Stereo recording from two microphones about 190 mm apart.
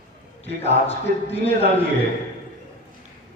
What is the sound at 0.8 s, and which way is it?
Speech, 35° left (ahead or behind).